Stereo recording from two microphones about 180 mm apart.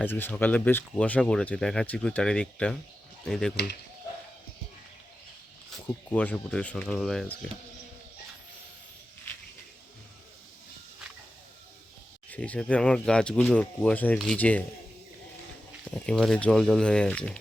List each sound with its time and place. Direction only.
0.0 s speech: 10° left (ahead or behind)
3.5 s speech: 65° left (ahead or behind)
6.1 s speech: 5° left (ahead or behind)
12.3 s speech: 5° left (ahead or behind)
15.8 s speech: 5° left (ahead or behind)